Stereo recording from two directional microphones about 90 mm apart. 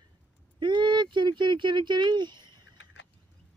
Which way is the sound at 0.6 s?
60° right (ahead or behind).